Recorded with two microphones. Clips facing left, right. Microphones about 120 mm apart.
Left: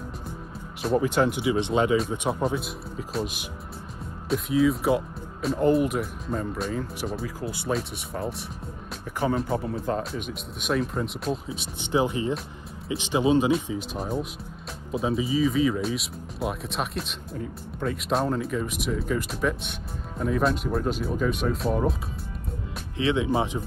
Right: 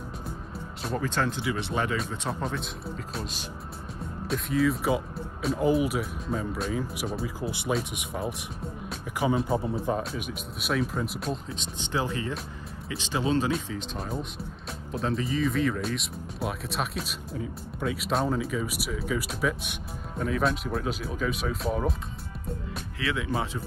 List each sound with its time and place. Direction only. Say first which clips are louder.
0.9 s speech: left 6 dB; 15° left (ahead or behind)
4.3 s speech: left 3 dB; centre (ahead or behind)
7.2 s speech: even; 20° right (ahead or behind)
9.2 s speech: even; 5° right (ahead or behind); by 13.5 s 15° left (ahead or behind)
13.9 s speech: left 4 dB; centre (ahead or behind)
22.9 s speech: left 6 dB; 25° left (ahead or behind)